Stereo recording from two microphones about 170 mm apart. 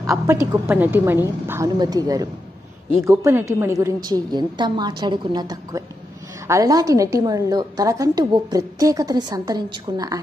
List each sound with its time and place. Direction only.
0.0 s a woman's voice: 20° right (ahead or behind)